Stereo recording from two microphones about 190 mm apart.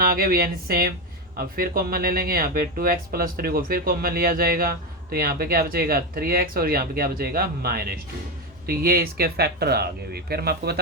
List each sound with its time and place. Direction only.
0.0 s speech: 50° right (ahead or behind)